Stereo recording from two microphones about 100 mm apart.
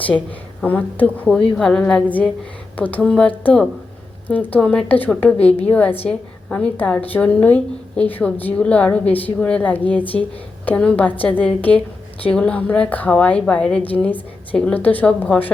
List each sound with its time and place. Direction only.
0.6 s a woman's voice: 15° left (ahead or behind)